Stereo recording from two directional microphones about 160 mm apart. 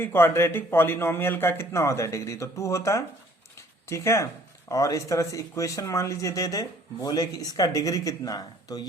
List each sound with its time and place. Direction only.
0.0 s a man's voice: 15° left (ahead or behind)